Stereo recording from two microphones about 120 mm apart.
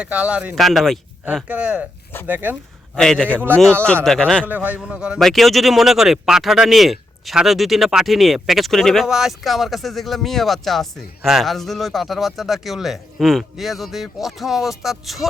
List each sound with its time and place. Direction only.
0.0 s a man's voice: 10° right (ahead or behind)
2.9 s a man's voice: 5° left (ahead or behind)
3.2 s speech: 15° right (ahead or behind)
4.0 s a man's voice: 5° left (ahead or behind)
4.4 s a man's voice: 15° right (ahead or behind)